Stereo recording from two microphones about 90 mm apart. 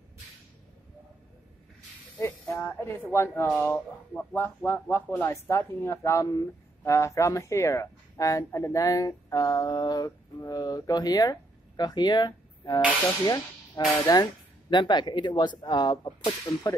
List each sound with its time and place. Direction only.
2.1 s a man's voice: 30° left (ahead or behind)